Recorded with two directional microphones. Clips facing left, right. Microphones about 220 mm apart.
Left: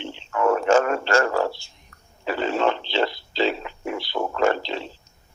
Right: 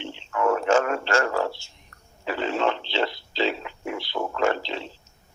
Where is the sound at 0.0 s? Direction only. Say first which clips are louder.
Left 2 dB; 40° left (ahead or behind).